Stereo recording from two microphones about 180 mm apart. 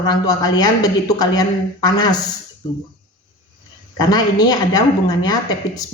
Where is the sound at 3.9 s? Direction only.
20° left (ahead or behind).